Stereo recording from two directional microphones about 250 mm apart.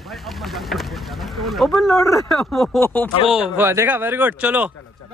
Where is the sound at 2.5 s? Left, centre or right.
Centre.